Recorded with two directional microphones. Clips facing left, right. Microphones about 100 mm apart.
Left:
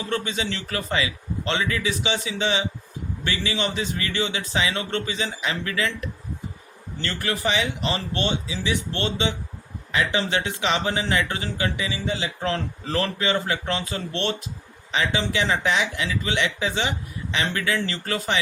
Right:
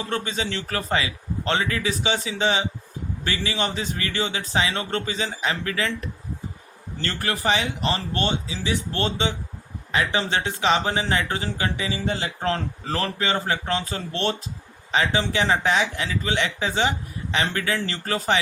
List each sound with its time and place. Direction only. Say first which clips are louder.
0.1 s speech: left 1 dB; 35° right (ahead or behind)